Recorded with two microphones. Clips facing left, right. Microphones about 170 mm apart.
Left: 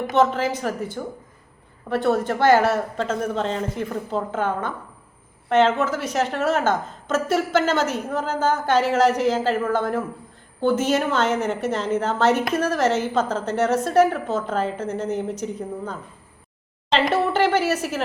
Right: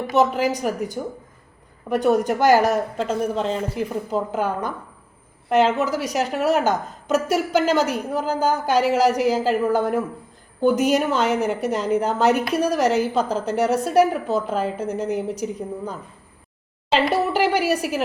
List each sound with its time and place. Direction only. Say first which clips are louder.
0.2 s a woman's voice: right 1 dB; 10° right (ahead or behind)
5.5 s a woman's voice: even; 10° right (ahead or behind)